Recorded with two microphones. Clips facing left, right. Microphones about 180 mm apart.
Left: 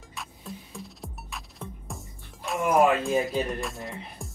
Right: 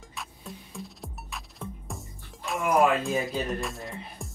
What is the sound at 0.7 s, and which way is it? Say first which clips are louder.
Music: even; centre (ahead or behind).